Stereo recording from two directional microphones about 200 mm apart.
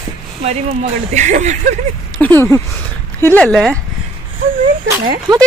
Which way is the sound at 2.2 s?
10° left (ahead or behind).